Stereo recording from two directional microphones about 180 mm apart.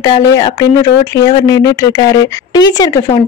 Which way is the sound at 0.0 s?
20° left (ahead or behind).